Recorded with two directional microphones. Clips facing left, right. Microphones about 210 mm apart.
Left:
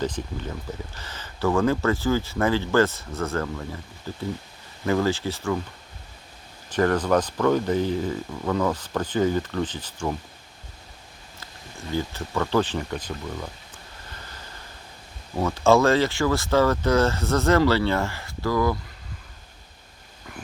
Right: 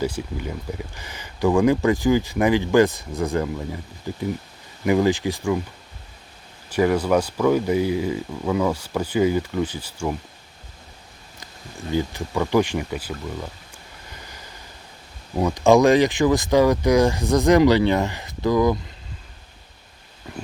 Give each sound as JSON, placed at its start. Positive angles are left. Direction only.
{"t": 0.0, "sound": "speech", "side_deg": -10}
{"t": 6.7, "sound": "speech", "side_deg": -10}
{"t": 11.9, "sound": "speech", "side_deg": -15}
{"t": 15.4, "sound": "speech", "side_deg": -15}
{"t": 20.3, "sound": "a sound", "side_deg": -25}